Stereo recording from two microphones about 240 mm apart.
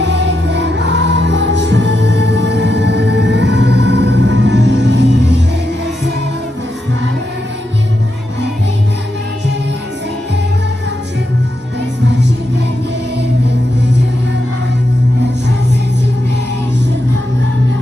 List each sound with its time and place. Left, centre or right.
0.0 s music: right